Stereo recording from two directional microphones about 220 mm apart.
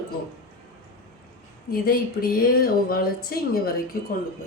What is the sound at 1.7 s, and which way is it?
Speech, 40° left (ahead or behind).